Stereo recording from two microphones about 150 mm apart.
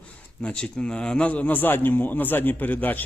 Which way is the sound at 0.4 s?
5° left (ahead or behind).